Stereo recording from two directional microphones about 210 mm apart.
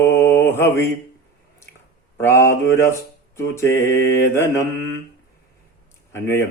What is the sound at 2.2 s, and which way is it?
Speech, 10° left (ahead or behind).